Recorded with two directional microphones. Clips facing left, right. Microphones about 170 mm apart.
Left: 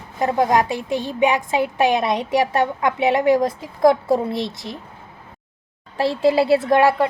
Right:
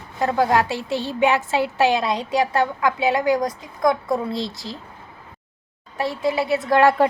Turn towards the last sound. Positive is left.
turn(degrees=30)  # may be behind; listen again after turning